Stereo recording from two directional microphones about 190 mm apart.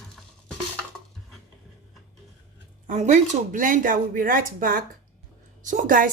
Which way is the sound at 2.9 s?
40° right (ahead or behind).